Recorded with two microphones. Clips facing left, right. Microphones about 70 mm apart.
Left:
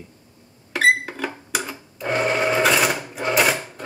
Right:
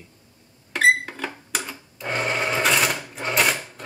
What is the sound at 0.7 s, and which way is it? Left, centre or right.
Sewing machine, centre.